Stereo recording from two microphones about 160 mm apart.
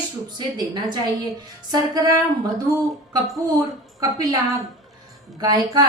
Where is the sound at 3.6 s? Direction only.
20° right (ahead or behind).